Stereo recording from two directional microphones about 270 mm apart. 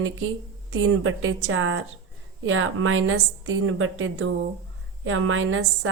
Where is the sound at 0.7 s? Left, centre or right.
Right.